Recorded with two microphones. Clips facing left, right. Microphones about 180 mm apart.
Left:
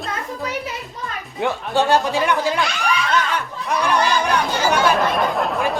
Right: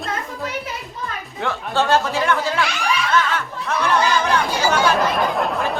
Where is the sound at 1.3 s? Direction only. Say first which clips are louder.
Left 2 dB; 15° left (ahead or behind).